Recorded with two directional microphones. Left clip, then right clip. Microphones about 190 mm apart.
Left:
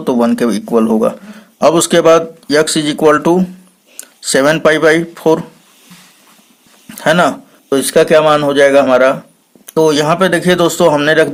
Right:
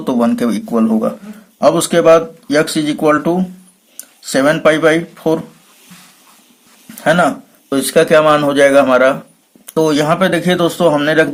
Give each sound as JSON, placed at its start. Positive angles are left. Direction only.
{"t": 0.0, "sound": "speech", "side_deg": 25}
{"t": 6.9, "sound": "speech", "side_deg": 40}